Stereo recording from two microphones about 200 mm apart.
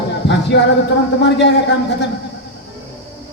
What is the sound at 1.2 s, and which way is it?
Speech, 60° left (ahead or behind).